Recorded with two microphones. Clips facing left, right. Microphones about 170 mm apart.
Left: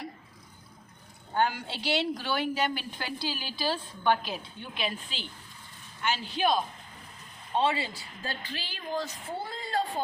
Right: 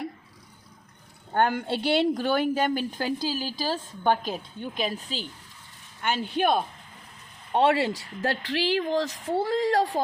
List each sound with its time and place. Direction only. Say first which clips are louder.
1.3 s a woman's voice: right 5 dB; 55° right (ahead or behind); by 5.2 s 40° right (ahead or behind)
6.0 s speech: right 3 dB; 50° right (ahead or behind)
7.5 s speech: right 6 dB; 70° right (ahead or behind); by 10.0 s 85° right